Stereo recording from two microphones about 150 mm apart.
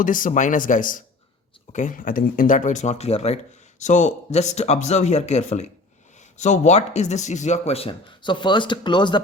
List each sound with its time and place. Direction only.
0.0 s speech: 65° left (ahead or behind); by 9.2 s 30° left (ahead or behind)